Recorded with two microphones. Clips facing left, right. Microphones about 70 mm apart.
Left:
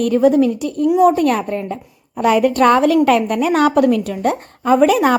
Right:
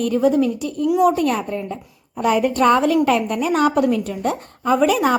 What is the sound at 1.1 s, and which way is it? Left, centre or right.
A woman's voice, left.